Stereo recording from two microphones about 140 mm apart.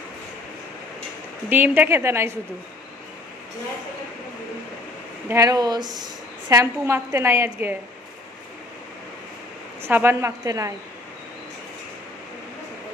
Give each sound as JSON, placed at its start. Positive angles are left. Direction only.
{"t": 1.5, "sound": "a woman's voice", "side_deg": -15}
{"t": 5.3, "sound": "a woman's voice", "side_deg": -25}
{"t": 9.8, "sound": "a woman's voice", "side_deg": -15}